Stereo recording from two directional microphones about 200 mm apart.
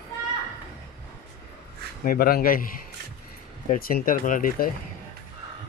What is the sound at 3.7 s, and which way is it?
Speech, 45° left (ahead or behind).